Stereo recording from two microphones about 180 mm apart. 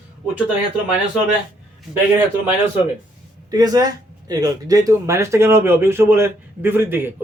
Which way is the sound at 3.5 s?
20° right (ahead or behind).